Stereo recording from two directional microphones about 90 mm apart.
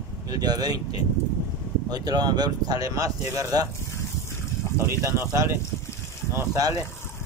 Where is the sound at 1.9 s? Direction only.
50° right (ahead or behind).